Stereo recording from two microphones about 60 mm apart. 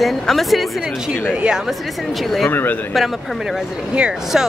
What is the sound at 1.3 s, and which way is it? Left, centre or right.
Speech, centre.